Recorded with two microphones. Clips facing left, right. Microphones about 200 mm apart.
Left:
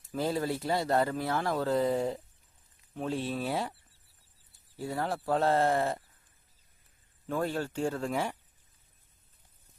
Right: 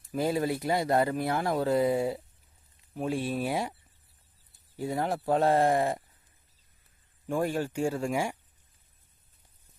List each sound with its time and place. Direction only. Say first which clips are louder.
0.1 s speech: right 3 dB; 10° right (ahead or behind)
4.8 s speech: right 3 dB; 15° right (ahead or behind)
7.3 s speech: right 3 dB; 15° right (ahead or behind)